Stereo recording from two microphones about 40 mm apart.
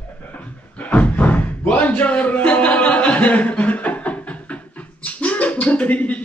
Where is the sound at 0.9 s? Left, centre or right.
Left.